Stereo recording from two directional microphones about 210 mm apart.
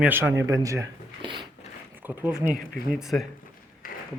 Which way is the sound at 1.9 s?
10° right (ahead or behind).